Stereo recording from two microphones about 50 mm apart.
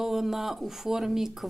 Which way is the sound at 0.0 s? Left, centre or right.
Centre.